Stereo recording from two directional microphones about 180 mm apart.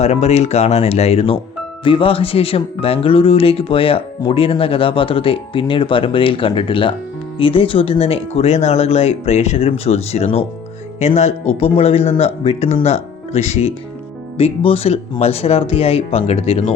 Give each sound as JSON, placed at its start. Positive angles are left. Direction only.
{"t": 0.0, "sound": "speech", "side_deg": 35}